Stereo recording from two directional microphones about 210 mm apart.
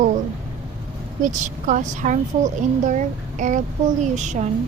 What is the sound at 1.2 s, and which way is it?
Speech, 35° right (ahead or behind).